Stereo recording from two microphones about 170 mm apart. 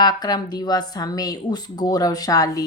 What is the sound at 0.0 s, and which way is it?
Speech, 25° left (ahead or behind).